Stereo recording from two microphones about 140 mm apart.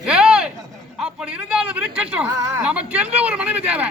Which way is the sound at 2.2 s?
20° right (ahead or behind).